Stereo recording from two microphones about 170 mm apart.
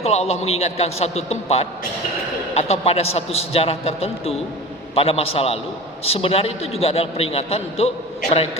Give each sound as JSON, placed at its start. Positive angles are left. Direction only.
{"t": 0.0, "sound": "a man's voice", "side_deg": 40}